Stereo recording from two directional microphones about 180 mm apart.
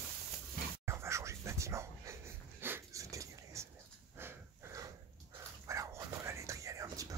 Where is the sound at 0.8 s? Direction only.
15° right (ahead or behind).